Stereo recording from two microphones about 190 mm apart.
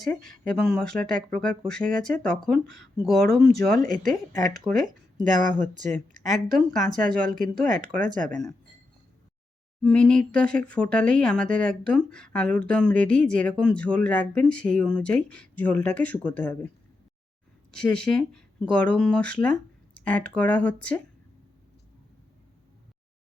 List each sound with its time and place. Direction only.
0.0 s speech: 5° left (ahead or behind)
3.8 s speech: 45° right (ahead or behind)
9.8 s speech: 5° left (ahead or behind)